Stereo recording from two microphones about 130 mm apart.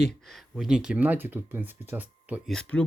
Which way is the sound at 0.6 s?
5° right (ahead or behind).